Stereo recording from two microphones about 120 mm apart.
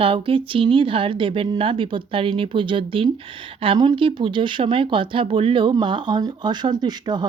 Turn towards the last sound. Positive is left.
turn(degrees=-35)  # may be behind; listen again after turning